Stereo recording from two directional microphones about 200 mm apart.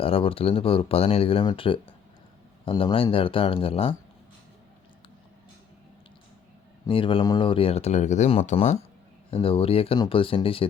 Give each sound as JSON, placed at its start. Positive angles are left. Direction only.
{"t": 0.0, "sound": "speech", "side_deg": 30}
{"t": 6.8, "sound": "speech", "side_deg": 25}